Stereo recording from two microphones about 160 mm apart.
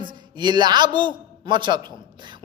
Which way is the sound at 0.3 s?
25° right (ahead or behind).